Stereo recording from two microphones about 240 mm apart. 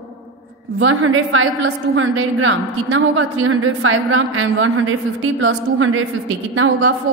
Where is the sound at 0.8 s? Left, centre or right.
Right.